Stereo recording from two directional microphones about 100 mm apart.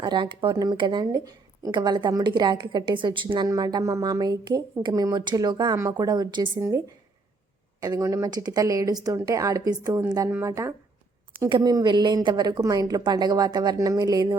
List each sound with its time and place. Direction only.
0.0 s speech: 50° right (ahead or behind)
6.6 s speech: 30° right (ahead or behind)
10.2 s speech: 25° right (ahead or behind)
11.4 s a woman's voice: 55° right (ahead or behind)